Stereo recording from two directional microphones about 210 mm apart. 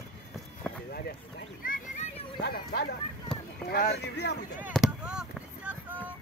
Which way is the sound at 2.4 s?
50° left (ahead or behind).